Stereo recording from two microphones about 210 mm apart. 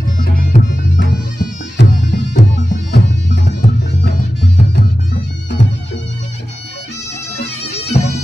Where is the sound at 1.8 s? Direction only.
55° left (ahead or behind).